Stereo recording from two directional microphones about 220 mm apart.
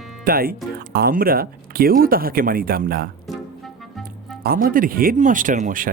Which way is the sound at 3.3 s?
Centre (ahead or behind).